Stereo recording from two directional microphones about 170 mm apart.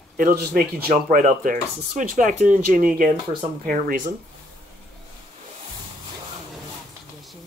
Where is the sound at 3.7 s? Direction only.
60° right (ahead or behind).